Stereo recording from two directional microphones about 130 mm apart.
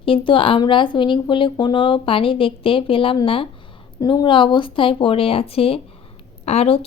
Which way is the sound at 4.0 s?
35° left (ahead or behind).